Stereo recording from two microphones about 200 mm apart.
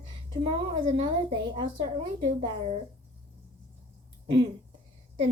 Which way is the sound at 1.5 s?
25° right (ahead or behind).